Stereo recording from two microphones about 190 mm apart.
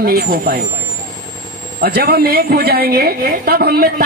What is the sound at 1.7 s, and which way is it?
A woman's voice, 55° right (ahead or behind).